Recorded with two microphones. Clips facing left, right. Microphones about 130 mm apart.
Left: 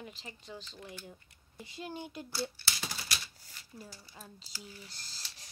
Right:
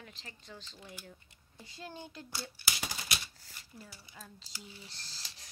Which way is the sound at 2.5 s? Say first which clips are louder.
Right 1 dB; 15° right (ahead or behind).